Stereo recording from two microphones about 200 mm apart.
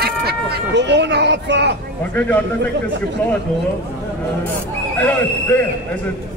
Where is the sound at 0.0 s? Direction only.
50° right (ahead or behind).